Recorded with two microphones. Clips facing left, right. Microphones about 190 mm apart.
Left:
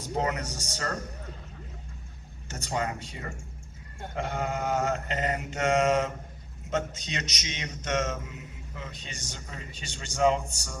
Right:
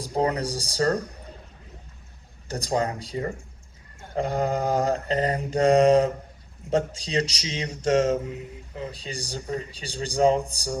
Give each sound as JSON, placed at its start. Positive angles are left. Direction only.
{"t": 0.0, "sound": "a man's voice", "side_deg": -35}
{"t": 2.5, "sound": "a man's voice", "side_deg": -35}